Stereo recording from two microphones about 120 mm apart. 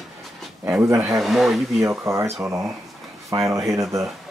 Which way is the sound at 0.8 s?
25° right (ahead or behind).